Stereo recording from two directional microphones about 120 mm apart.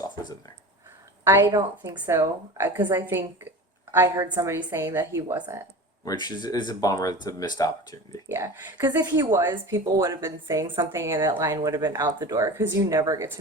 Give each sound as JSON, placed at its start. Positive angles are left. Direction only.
{"t": 1.2, "sound": "speech", "side_deg": -25}
{"t": 6.1, "sound": "speech", "side_deg": 35}
{"t": 8.3, "sound": "speech", "side_deg": -25}